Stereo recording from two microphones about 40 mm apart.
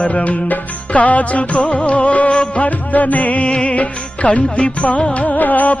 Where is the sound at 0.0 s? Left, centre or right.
Left.